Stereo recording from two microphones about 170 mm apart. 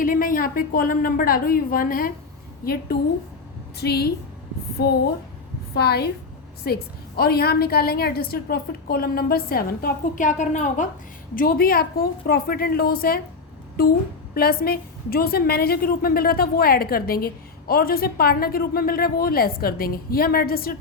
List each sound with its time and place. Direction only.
0.0 s a woman's voice: 55° left (ahead or behind)
3.8 s a woman's voice: 70° left (ahead or behind)
7.2 s a woman's voice: 65° left (ahead or behind); by 10.8 s 45° left (ahead or behind)
11.3 s a woman's voice: 60° left (ahead or behind)